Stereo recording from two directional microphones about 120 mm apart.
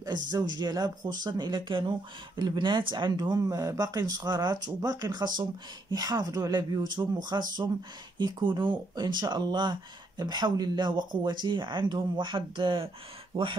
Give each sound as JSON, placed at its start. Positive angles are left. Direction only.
{"t": 0.0, "sound": "speech", "side_deg": -35}